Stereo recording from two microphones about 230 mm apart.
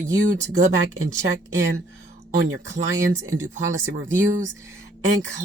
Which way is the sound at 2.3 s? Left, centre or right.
Right.